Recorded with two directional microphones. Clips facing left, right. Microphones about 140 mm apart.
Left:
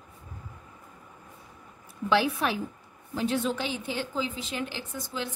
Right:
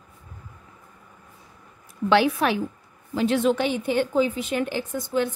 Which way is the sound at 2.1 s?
75° right (ahead or behind).